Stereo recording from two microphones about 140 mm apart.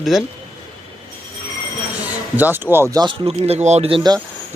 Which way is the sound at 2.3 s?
15° right (ahead or behind).